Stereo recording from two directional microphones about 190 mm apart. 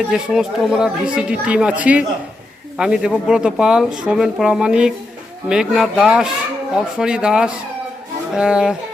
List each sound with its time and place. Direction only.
0.1 s speech: centre (ahead or behind)